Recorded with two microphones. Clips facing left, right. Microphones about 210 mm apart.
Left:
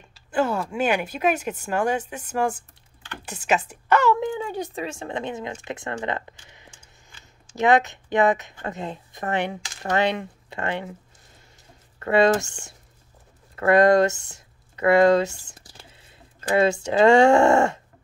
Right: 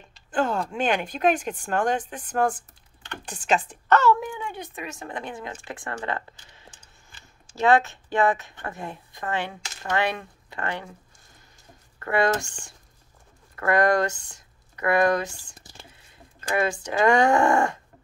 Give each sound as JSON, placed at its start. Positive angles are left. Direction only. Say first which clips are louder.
{"t": 0.1, "sound": "speech", "louder": "left 2 dB", "side_deg": 5}
{"t": 4.4, "sound": "speech", "louder": "left 6 dB", "side_deg": 35}
{"t": 12.0, "sound": "speech", "louder": "left 5 dB", "side_deg": 25}